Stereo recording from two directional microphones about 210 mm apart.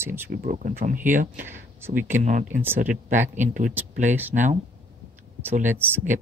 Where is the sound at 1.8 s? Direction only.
10° right (ahead or behind).